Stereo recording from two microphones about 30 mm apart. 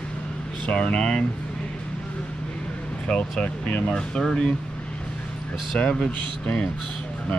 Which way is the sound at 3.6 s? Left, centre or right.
Left.